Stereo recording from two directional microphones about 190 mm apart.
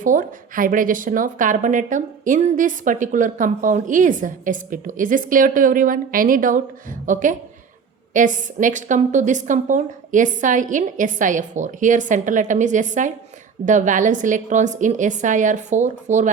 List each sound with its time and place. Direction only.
0.0 s a woman's voice: 45° right (ahead or behind)